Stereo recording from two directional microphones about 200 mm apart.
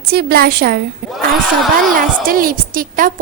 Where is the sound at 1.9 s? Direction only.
45° right (ahead or behind).